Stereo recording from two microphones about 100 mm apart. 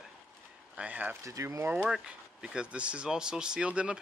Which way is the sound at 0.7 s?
15° right (ahead or behind).